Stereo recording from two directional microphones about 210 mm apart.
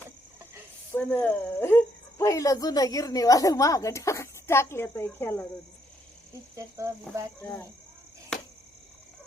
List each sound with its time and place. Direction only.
0.9 s speech: 10° left (ahead or behind)
7.1 s speech: 5° left (ahead or behind)